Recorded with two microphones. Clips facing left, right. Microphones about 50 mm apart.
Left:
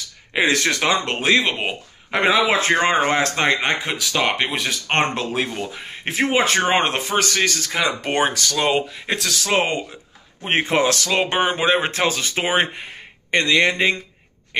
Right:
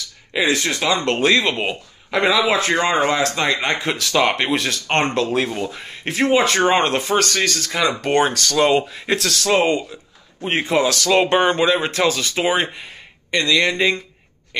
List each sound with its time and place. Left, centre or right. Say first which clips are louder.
0.3 s speech: left 1 dB; left
1.0 s speech: right 2 dB; centre
2.0 s a man's voice: even; left
3.8 s speech: right 3 dB; centre
5.0 s speech: right 3 dB; left
5.3 s speech: right 3 dB; centre
5.9 s speech: right 3 dB; left; by 9.4 s centre
9.5 s a man's voice: right 4 dB; left
11.1 s speech: right 4 dB; centre
11.6 s a man's voice: right 1 dB; left
14.5 s a sound: left 2 dB; left